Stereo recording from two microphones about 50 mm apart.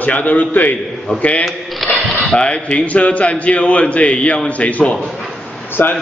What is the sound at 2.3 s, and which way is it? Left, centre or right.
A man's voice, left.